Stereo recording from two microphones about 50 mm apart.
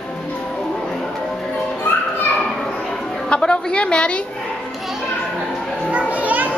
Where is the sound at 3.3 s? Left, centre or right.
Centre.